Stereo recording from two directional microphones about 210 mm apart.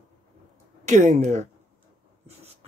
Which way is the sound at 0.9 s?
35° right (ahead or behind).